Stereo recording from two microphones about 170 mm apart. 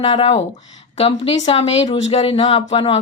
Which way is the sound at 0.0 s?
40° left (ahead or behind).